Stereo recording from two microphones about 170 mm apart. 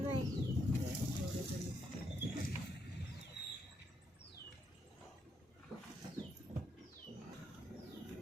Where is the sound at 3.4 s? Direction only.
75° left (ahead or behind).